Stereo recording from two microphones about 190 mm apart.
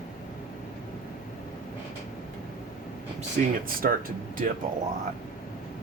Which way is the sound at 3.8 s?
50° right (ahead or behind).